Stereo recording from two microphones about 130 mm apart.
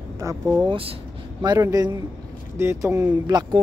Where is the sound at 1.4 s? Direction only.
30° right (ahead or behind).